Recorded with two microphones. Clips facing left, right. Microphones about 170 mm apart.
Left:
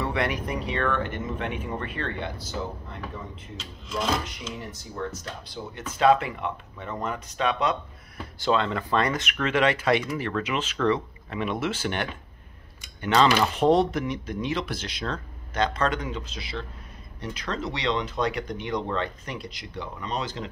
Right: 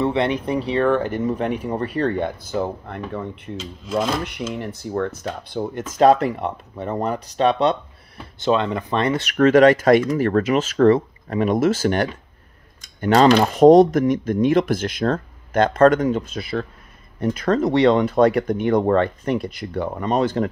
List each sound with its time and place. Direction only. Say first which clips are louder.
0.0 s speech: right 7 dB; 25° right (ahead or behind); by 5.9 s 55° right (ahead or behind)
5.9 s speech: right 6 dB; 40° right (ahead or behind)
8.4 s speech: right 5 dB; 20° right (ahead or behind)
9.2 s speech: right 11 dB; 40° right (ahead or behind)